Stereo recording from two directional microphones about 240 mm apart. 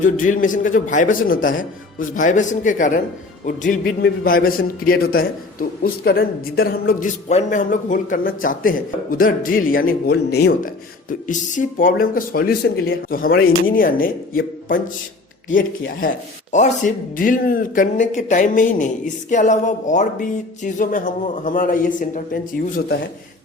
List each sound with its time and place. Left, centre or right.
0.0 s a man's voice: left